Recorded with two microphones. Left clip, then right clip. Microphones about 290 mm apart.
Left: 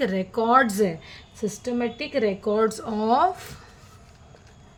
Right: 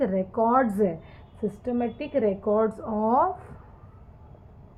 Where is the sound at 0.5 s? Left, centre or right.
Left.